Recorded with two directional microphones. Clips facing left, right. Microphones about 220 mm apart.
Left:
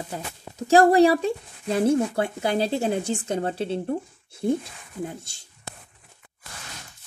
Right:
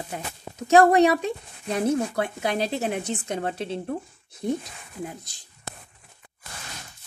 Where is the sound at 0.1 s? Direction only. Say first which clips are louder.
Even; 30° left (ahead or behind).